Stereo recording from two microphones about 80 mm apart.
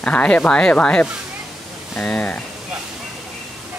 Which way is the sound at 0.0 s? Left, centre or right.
Centre.